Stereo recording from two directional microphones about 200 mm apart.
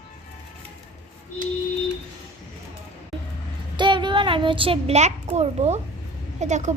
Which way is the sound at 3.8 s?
25° right (ahead or behind).